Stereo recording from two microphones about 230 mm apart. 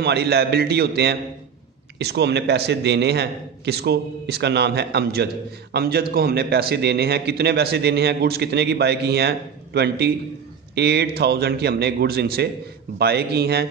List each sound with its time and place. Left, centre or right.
0.0 s a man's voice: right